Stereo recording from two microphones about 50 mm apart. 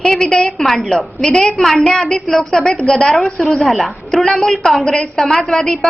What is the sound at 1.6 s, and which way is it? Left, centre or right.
A woman's voice, centre.